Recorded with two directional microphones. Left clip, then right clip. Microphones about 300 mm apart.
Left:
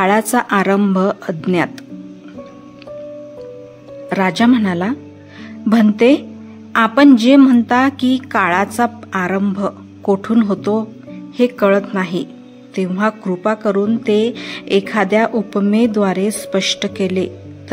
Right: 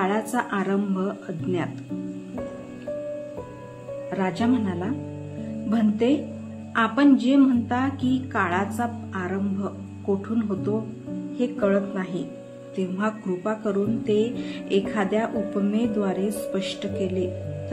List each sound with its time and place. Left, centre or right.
0.0 s a woman's voice: left
4.1 s a woman's voice: left